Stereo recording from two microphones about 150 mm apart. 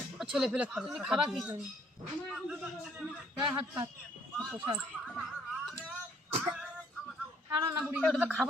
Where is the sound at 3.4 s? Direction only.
30° right (ahead or behind).